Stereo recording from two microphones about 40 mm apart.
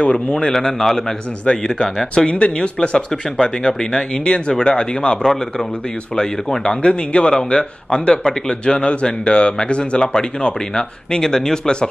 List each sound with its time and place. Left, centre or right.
0.0 s speech: left
5.2 s speech: centre
6.9 s speech: left